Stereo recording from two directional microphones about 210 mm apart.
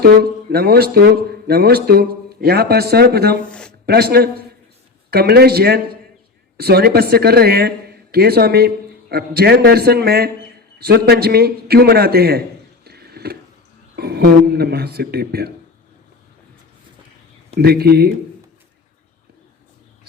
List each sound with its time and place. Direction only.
0.0 s speech: 50° right (ahead or behind)
12.8 s a sound: 50° right (ahead or behind)
13.9 s speech: 50° right (ahead or behind)
17.6 s speech: 50° right (ahead or behind)